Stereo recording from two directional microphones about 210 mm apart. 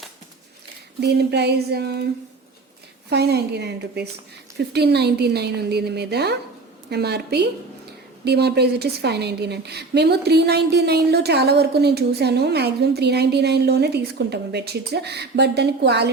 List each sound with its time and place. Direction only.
1.0 s a woman's voice: 55° right (ahead or behind)
3.1 s a woman's voice: 50° right (ahead or behind)